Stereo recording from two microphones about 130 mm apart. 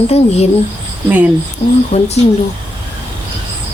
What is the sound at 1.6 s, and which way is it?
Speech, 55° left (ahead or behind).